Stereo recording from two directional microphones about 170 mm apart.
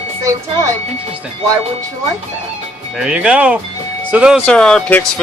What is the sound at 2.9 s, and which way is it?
Speech, 5° right (ahead or behind).